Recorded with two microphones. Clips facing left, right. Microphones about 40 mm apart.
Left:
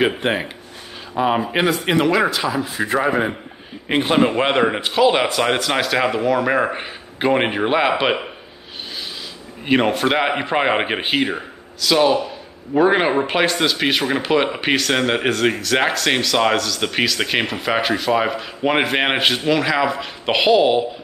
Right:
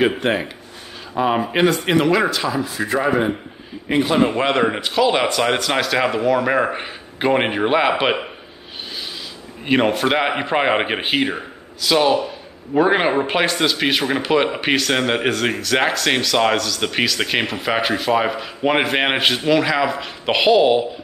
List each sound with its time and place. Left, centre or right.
0.2 s a man's voice: left
1.1 s a man's voice: centre
3.1 s a man's voice: left
3.9 s a man's voice: left
4.3 s a man's voice: centre
9.7 s a man's voice: centre